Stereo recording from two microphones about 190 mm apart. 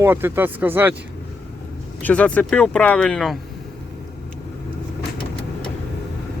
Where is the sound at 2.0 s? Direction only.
5° left (ahead or behind).